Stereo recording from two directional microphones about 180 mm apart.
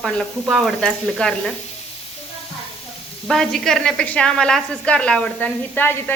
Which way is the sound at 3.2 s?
Centre (ahead or behind).